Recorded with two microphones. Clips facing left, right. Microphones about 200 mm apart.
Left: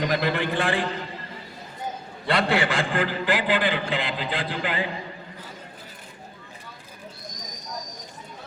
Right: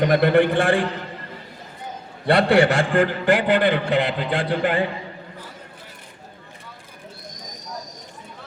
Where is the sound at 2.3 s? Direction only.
60° right (ahead or behind).